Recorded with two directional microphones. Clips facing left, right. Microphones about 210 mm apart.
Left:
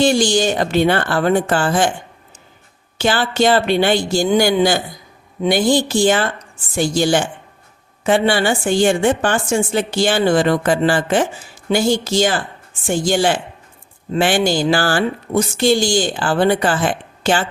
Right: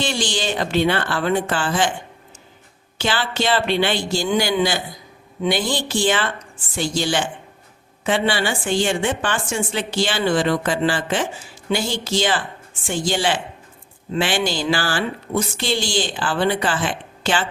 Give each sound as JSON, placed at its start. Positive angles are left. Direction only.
{"t": 0.0, "sound": "a woman's voice", "side_deg": 45}
{"t": 3.0, "sound": "a woman's voice", "side_deg": 45}